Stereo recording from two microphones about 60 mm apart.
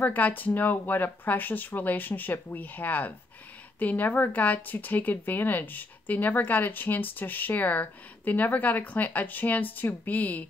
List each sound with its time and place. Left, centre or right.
0.0 s speech: left